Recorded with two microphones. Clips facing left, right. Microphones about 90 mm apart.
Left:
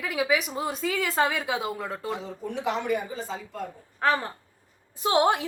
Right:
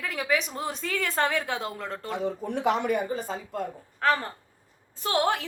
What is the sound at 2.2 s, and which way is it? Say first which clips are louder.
Speech: right 4 dB; 55° right (ahead or behind).